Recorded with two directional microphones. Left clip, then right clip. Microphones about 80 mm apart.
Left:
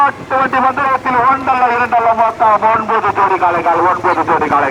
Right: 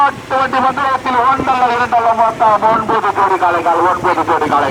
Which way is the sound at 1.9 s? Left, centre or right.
Centre.